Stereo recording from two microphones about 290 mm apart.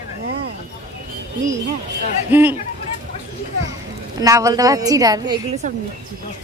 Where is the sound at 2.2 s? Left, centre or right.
Centre.